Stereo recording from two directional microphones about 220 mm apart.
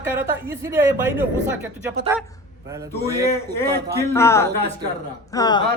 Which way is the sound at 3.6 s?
45° right (ahead or behind).